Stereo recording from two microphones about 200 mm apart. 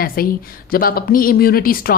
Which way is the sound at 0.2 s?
45° left (ahead or behind).